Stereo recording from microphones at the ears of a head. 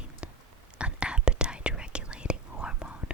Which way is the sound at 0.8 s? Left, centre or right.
Centre.